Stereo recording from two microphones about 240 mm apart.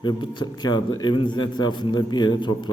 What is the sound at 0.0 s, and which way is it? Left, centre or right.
A man's voice, centre.